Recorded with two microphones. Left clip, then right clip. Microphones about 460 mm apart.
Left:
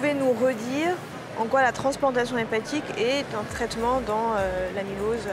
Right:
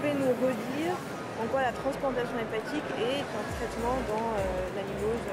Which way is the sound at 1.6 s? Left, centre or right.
Left.